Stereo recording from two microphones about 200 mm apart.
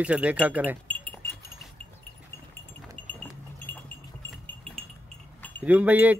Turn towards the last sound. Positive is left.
turn(degrees=-10)  # may be behind; listen again after turning